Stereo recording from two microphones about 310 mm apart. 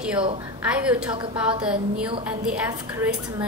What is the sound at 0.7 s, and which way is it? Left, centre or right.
Speech, centre.